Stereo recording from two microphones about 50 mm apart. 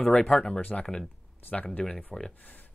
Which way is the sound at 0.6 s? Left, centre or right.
Left.